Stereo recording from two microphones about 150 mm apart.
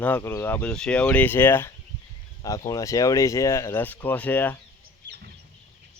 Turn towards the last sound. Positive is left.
turn(degrees=10)  # may be behind; listen again after turning